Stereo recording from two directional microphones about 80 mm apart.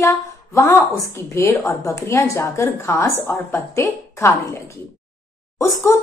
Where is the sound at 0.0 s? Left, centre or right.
Left.